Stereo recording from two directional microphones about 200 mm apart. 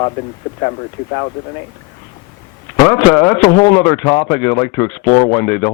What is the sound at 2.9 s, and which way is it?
Speech, 10° left (ahead or behind).